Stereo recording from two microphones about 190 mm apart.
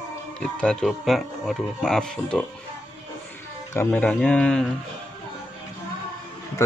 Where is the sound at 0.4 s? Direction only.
5° left (ahead or behind).